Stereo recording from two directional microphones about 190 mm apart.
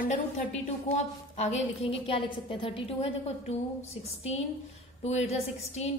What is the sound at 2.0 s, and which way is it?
Speech, 30° left (ahead or behind).